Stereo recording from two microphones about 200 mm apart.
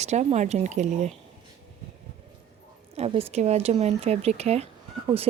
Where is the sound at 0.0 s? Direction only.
35° right (ahead or behind).